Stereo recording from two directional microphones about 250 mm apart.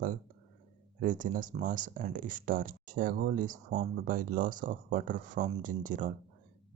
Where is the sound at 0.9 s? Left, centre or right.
Right.